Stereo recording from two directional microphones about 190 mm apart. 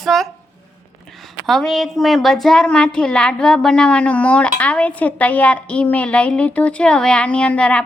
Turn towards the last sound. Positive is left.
turn(degrees=5)  # may be behind; listen again after turning